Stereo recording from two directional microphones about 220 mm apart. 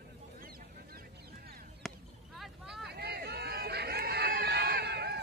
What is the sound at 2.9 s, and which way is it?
Run, 45° right (ahead or behind).